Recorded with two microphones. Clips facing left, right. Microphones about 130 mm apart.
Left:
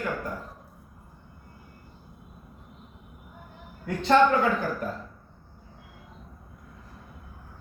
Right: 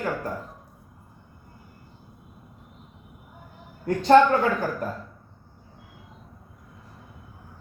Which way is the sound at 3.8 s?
40° right (ahead or behind).